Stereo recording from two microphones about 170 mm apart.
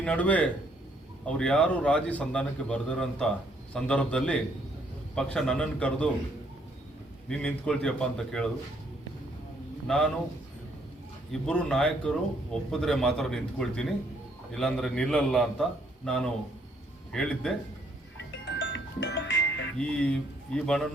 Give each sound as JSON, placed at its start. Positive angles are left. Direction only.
{"t": 0.0, "sound": "a man's voice", "side_deg": 5}
{"t": 7.3, "sound": "a man's voice", "side_deg": 5}
{"t": 9.8, "sound": "a man's voice", "side_deg": 5}
{"t": 11.3, "sound": "a man's voice", "side_deg": 5}
{"t": 18.4, "sound": "music", "side_deg": 90}
{"t": 19.8, "sound": "a man's voice", "side_deg": 5}